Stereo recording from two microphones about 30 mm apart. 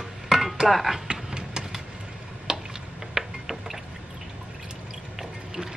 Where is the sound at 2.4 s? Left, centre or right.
Centre.